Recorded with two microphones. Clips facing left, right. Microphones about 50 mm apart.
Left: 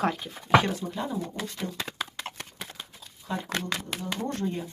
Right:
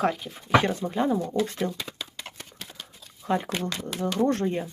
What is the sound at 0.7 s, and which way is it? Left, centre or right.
Speech, right.